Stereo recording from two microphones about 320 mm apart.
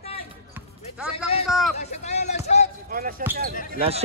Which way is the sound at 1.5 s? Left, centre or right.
Centre.